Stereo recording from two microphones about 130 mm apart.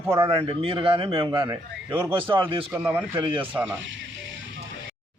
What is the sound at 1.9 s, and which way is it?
Speech, 10° right (ahead or behind).